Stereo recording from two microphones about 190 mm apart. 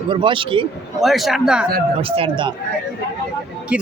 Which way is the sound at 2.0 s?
30° right (ahead or behind).